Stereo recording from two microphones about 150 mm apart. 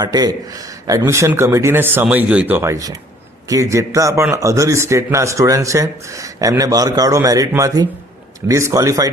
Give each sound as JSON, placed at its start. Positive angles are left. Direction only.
{"t": 0.0, "sound": "a man's voice", "side_deg": -25}